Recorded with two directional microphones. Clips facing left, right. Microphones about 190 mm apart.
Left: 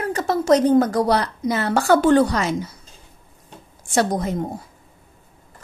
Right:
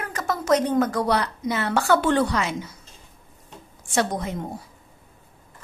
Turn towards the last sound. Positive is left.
turn(degrees=40)  # may be behind; listen again after turning